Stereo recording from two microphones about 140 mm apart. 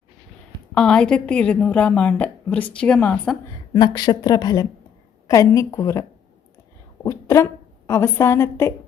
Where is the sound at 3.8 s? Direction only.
30° left (ahead or behind).